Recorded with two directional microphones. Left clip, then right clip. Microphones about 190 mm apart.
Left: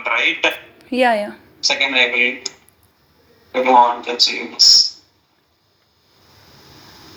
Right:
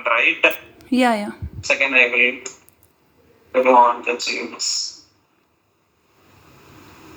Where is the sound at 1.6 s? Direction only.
45° left (ahead or behind).